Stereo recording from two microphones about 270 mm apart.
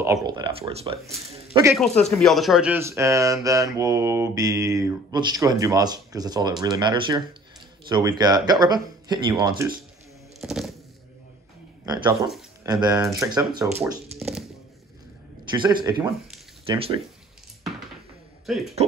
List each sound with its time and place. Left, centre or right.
0.0 s speech: centre
1.5 s speech: centre
1.8 s speech: centre
10.4 s a sound: centre
11.8 s speech: centre
12.2 s a sound: centre
12.8 s speech: centre
14.1 s speech: centre
15.5 s speech: centre
18.4 s speech: centre